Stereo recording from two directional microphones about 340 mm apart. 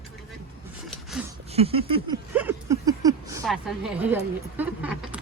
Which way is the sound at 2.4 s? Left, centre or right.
Centre.